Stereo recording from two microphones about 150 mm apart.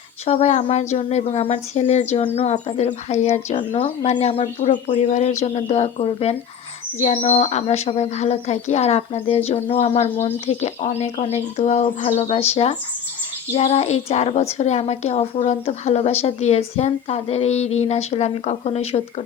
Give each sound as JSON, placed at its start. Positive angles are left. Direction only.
{"t": 0.3, "sound": "a woman's voice", "side_deg": 50}
{"t": 4.7, "sound": "a woman's voice", "side_deg": 55}